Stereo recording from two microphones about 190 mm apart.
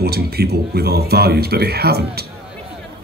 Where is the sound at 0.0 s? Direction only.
55° right (ahead or behind).